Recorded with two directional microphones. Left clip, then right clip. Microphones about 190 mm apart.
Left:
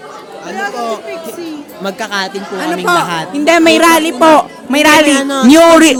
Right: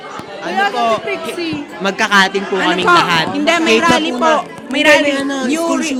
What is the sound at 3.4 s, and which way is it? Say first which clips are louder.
Speech: left 5 dB; 75° left (ahead or behind).